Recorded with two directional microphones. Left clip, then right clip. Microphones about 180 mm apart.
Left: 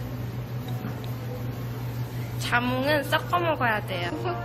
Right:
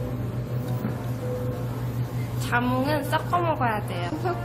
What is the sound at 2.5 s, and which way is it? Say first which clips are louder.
Speech: left 1 dB; 5° left (ahead or behind).